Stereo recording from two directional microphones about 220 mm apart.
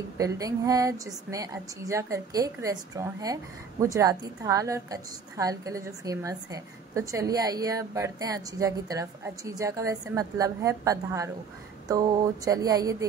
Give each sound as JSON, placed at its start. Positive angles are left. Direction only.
{"t": 0.2, "sound": "a woman's voice", "side_deg": -15}